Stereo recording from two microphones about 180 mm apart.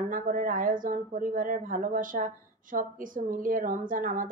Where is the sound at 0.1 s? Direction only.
50° right (ahead or behind).